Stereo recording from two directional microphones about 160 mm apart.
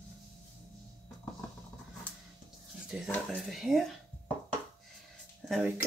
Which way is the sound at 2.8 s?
Centre (ahead or behind).